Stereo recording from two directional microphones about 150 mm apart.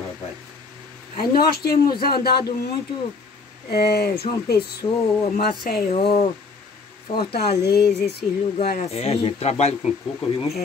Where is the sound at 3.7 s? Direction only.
90° left.